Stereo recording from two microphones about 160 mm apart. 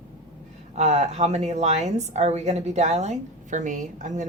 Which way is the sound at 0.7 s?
45° right (ahead or behind).